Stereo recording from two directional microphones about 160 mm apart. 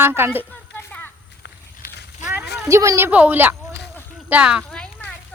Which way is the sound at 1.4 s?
90° left.